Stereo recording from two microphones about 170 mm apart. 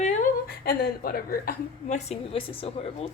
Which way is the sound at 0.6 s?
65° left (ahead or behind).